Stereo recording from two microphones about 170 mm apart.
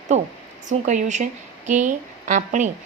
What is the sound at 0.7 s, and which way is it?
A woman's voice, 45° right (ahead or behind).